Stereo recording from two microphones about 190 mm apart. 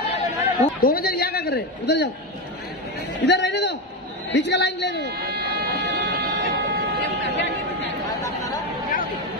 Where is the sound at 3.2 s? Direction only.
65° left (ahead or behind).